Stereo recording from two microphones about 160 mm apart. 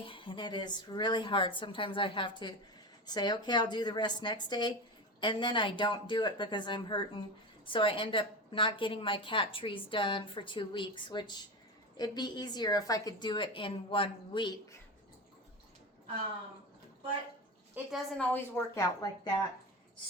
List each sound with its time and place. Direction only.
0.0 s a woman's voice: 30° left (ahead or behind)
17.9 s a woman's voice: 10° left (ahead or behind)